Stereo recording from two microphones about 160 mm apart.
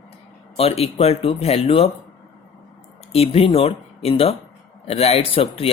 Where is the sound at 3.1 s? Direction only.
40° left (ahead or behind).